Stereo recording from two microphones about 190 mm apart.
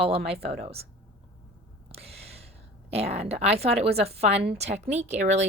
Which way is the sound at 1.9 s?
30° right (ahead or behind).